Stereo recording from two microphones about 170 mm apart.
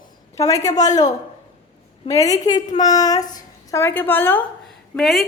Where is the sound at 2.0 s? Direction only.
20° left (ahead or behind).